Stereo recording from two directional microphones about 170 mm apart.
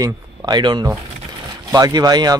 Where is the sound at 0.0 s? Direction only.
25° right (ahead or behind).